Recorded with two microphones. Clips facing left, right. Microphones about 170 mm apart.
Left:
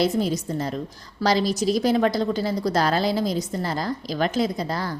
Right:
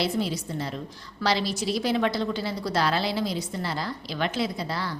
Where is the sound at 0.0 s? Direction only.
45° left (ahead or behind).